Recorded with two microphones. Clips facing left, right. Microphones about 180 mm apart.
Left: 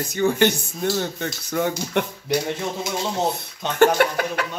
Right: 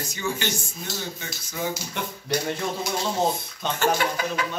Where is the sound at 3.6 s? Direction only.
20° left (ahead or behind).